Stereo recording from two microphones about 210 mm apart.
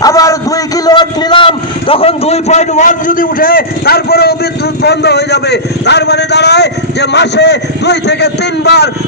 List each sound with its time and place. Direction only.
0.0 s a man's voice: 15° left (ahead or behind); by 8.9 s 55° left (ahead or behind)